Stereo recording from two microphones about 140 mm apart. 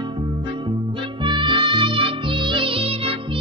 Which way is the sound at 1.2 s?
35° right (ahead or behind).